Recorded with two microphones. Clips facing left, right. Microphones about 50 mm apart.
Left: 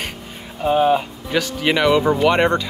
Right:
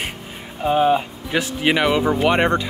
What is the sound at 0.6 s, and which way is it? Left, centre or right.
Speech, centre.